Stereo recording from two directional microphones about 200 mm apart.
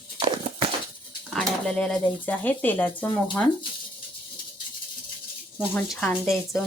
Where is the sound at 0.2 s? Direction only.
25° right (ahead or behind).